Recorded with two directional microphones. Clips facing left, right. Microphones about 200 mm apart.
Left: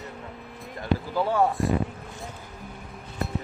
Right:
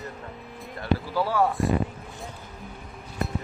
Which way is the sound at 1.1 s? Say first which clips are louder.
Left 2 dB; 20° left (ahead or behind).